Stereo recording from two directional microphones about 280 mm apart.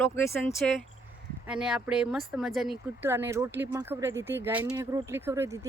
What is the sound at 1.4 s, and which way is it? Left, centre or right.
Speech, centre.